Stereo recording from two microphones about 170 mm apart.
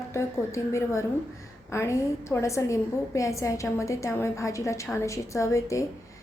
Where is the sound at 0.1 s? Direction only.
15° left (ahead or behind).